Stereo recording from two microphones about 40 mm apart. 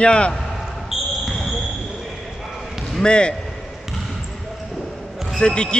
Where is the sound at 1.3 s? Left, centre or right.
Centre.